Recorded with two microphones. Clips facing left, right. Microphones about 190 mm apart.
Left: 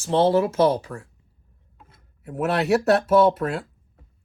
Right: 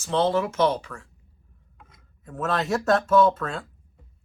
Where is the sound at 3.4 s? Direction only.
35° left (ahead or behind).